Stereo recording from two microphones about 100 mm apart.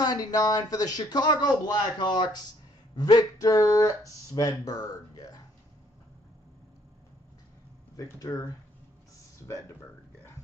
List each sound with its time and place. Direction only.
0.0 s speech: 40° left (ahead or behind)
7.9 s speech: 35° left (ahead or behind)